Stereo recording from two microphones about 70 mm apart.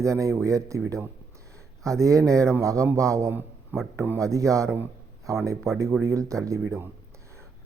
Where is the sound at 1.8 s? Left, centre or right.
Right.